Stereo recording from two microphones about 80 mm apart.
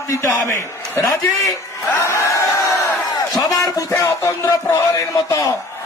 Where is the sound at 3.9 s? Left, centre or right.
Left.